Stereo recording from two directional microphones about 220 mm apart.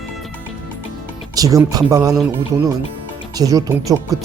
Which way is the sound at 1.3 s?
15° right (ahead or behind).